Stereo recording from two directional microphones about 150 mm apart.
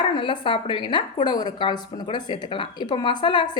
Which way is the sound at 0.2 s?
35° left (ahead or behind).